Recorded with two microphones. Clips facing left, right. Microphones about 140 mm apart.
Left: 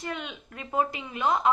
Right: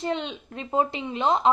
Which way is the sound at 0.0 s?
25° right (ahead or behind).